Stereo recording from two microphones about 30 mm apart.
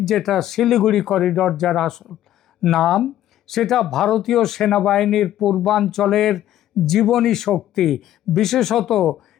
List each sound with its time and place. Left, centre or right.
0.0 s speech: centre